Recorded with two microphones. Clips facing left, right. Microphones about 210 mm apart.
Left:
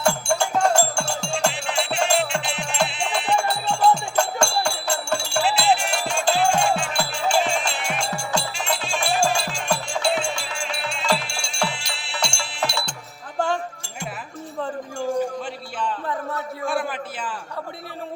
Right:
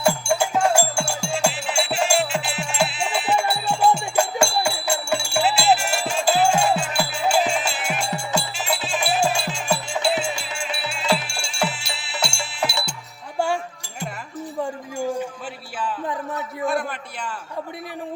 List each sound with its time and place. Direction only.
0.0 s music: 5° right (ahead or behind)